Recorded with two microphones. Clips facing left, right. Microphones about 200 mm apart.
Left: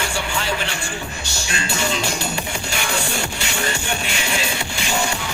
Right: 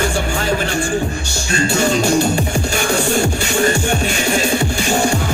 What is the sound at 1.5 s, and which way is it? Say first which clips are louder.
Music: right 9 dB; 45° right (ahead or behind).